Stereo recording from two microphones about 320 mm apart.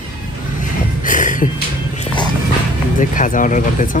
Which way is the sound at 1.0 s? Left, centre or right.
Left.